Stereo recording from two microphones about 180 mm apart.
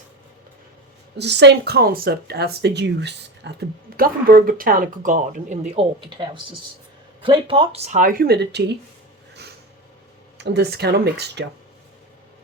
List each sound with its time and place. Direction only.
1.1 s speech: 70° right (ahead or behind); by 5.8 s 45° right (ahead or behind)
6.0 s speech: 25° right (ahead or behind)
8.0 s speech: 55° right (ahead or behind)
10.3 s speech: 70° right (ahead or behind)